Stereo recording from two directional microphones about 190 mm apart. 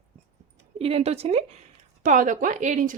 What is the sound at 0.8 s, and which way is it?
Speech, 30° right (ahead or behind).